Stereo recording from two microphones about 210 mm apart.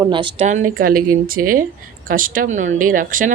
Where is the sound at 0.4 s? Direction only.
40° right (ahead or behind).